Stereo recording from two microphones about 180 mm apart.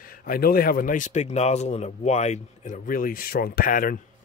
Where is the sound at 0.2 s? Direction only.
55° left (ahead or behind).